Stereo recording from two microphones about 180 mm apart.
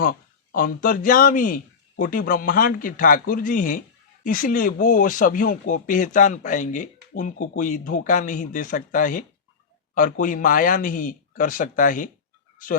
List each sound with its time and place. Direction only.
0.0 s speech: 50° left (ahead or behind)